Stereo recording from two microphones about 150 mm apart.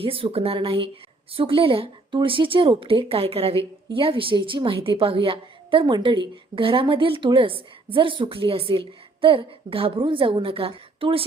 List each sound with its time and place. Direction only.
0.0 s a woman's voice: 35° right (ahead or behind)